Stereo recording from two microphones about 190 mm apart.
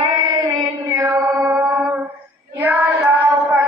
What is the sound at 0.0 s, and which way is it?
Child singing, 20° right (ahead or behind).